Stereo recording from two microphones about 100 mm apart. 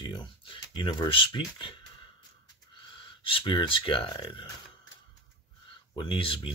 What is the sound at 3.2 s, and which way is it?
Speech, 60° left (ahead or behind).